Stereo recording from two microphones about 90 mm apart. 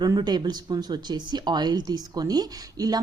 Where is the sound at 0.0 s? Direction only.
50° right (ahead or behind).